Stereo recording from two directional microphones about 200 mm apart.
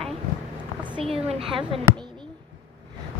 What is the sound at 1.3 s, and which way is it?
Speech, 25° right (ahead or behind).